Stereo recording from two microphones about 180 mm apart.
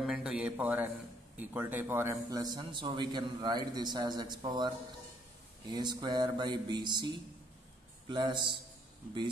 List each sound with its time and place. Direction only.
0.0 s a sound: 5° right (ahead or behind)
1.3 s a man's voice: 10° right (ahead or behind); by 7.1 s 25° right (ahead or behind)
8.1 s a man's voice: 25° right (ahead or behind)